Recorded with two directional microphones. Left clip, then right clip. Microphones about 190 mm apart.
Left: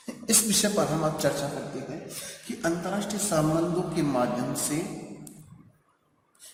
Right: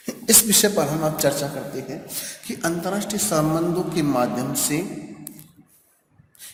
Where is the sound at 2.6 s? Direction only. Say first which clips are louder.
Right 4 dB; 45° right (ahead or behind).